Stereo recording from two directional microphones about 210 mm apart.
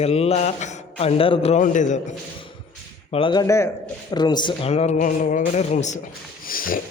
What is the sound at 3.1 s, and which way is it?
Speech, 25° left (ahead or behind).